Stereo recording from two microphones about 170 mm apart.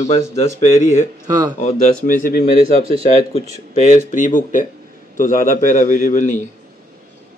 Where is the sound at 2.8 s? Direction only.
35° right (ahead or behind).